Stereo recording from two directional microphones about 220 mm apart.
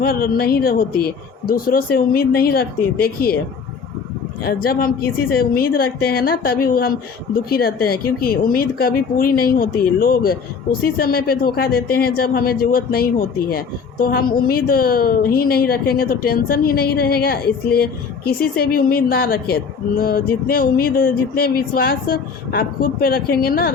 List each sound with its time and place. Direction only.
0.0 s speech: 45° left (ahead or behind)
4.4 s speech: 45° left (ahead or behind)